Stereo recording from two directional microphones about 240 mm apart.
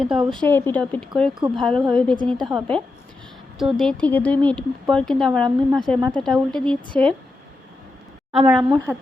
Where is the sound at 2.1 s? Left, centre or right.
Centre.